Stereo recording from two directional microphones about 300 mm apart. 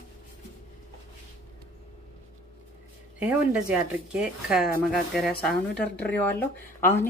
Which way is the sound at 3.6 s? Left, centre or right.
Centre.